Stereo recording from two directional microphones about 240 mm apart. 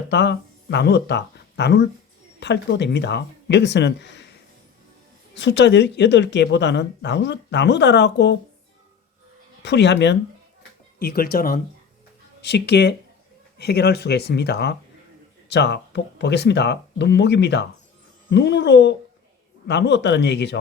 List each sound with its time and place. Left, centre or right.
0.1 s speech: left
5.3 s speech: left
9.6 s speech: left